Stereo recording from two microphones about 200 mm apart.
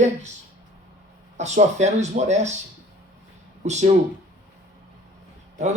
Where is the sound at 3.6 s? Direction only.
35° right (ahead or behind).